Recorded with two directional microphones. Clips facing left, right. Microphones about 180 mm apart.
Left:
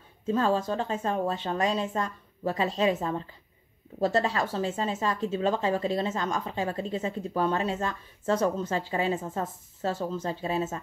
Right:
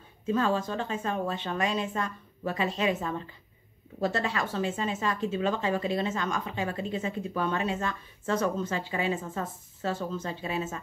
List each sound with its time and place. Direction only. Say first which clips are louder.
0.3 s speech: left 2 dB; 35° left (ahead or behind)